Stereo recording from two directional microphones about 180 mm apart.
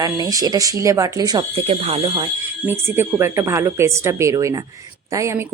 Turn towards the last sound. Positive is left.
turn(degrees=-15)  # may be behind; listen again after turning